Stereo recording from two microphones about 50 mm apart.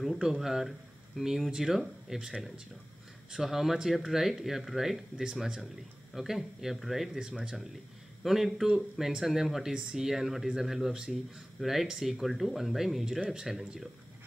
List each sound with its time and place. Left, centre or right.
0.0 s speech: centre
5.1 s speech: centre
5.4 s speech: centre
7.2 s speech: centre
7.5 s a man's voice: centre